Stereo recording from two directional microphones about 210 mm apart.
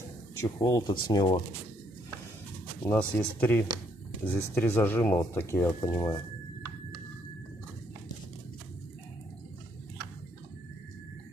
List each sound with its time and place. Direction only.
0.4 s speech: 15° left (ahead or behind)
2.9 s speech: 10° left (ahead or behind)